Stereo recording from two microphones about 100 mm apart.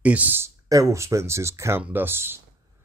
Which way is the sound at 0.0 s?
15° right (ahead or behind).